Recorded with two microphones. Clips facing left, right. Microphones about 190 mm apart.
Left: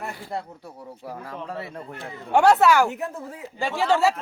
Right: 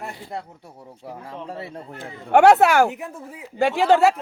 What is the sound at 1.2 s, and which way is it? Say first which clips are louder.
Speech: right 1 dB; 25° right (ahead or behind).